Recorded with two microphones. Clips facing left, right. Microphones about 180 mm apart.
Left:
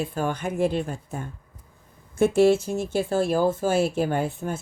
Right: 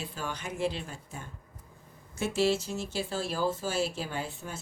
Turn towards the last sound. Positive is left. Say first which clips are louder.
# left 11 dB
turn(degrees=55)  # may be behind; listen again after turning